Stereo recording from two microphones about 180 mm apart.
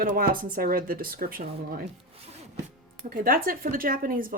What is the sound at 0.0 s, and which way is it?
Speech, 55° right (ahead or behind).